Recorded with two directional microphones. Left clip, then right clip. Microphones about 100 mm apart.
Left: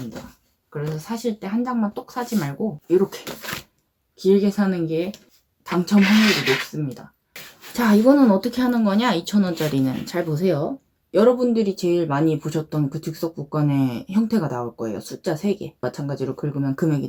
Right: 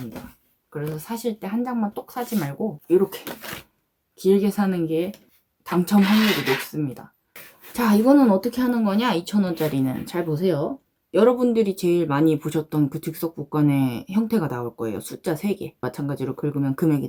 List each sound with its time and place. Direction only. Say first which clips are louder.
0.7 s speech: left 1 dB; 30° right (ahead or behind)
4.2 s speech: left 1 dB; 35° right (ahead or behind)
7.7 s speech: left 1 dB; 20° right (ahead or behind)
11.3 s speech: left 1 dB; 50° right (ahead or behind); by 14.3 s 25° right (ahead or behind)
14.3 s speech: left 1 dB; 45° right (ahead or behind)